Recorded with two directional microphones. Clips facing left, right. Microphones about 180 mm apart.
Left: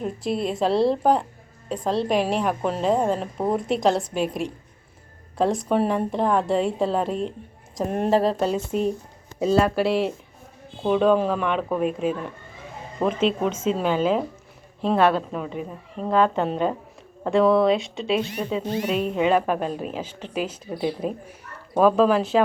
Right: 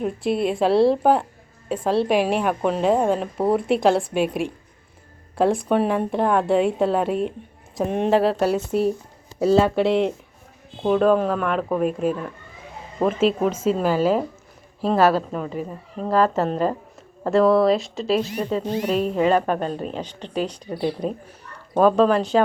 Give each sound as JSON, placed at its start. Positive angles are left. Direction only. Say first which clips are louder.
{"t": 0.3, "sound": "a woman's voice", "louder": "right 3 dB", "side_deg": -5}
{"t": 5.6, "sound": "a woman's voice", "louder": "right 1 dB", "side_deg": 0}
{"t": 8.4, "sound": "speech", "louder": "right 3 dB", "side_deg": -10}
{"t": 9.6, "sound": "speech", "louder": "right 1 dB", "side_deg": -25}
{"t": 10.8, "sound": "a woman's voice", "louder": "right 1 dB", "side_deg": 0}